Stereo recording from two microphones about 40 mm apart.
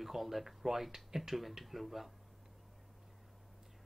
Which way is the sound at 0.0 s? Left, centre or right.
Centre.